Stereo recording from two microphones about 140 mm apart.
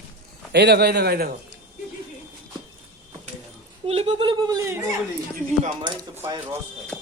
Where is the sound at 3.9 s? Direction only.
45° right (ahead or behind).